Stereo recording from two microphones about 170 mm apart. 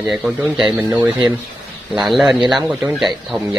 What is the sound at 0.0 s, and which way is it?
Speech, 5° right (ahead or behind).